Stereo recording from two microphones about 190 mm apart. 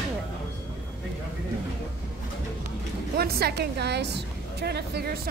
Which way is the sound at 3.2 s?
55° right (ahead or behind).